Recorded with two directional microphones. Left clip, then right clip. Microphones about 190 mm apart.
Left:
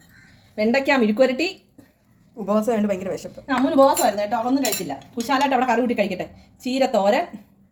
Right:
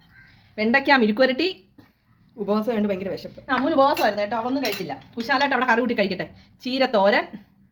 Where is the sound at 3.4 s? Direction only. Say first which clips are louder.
Left 2 dB; 45° right (ahead or behind).